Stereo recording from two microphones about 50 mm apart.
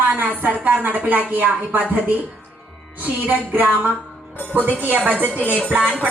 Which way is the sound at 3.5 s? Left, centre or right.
Right.